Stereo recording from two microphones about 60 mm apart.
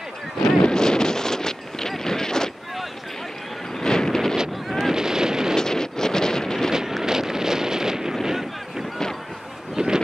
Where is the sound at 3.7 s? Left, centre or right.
Centre.